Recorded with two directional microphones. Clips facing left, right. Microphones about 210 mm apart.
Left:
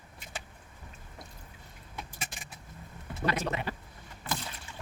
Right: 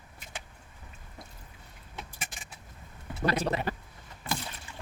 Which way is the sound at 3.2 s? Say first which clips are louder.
Right 3 dB; 35° right (ahead or behind).